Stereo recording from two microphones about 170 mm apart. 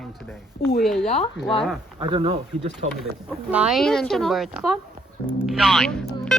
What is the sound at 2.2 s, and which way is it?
Speech, 40° right (ahead or behind).